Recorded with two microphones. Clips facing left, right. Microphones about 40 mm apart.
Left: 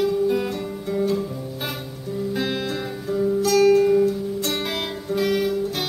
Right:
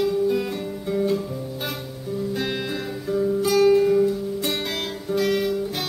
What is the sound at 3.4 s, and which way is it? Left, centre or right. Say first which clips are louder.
Music: left 1 dB; centre.